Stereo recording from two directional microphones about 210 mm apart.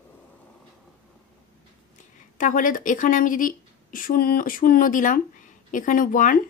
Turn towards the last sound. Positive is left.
turn(degrees=40)  # may be behind; listen again after turning